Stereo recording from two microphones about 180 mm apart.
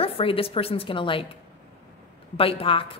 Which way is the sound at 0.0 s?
30° left (ahead or behind).